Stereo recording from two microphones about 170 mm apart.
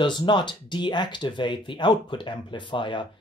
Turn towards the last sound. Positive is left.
turn(degrees=30)  # may be behind; listen again after turning